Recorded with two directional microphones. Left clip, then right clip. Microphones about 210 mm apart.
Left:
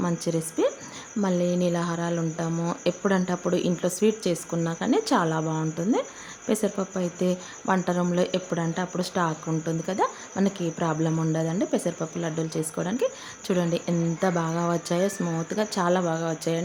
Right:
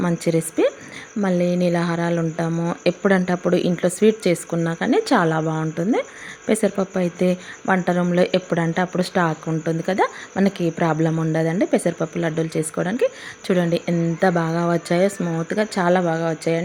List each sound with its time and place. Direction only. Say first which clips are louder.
0.0 s a woman's voice: right 7 dB; 15° right (ahead or behind)